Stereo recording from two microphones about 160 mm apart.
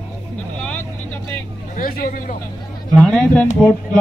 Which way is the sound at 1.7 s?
60° left (ahead or behind).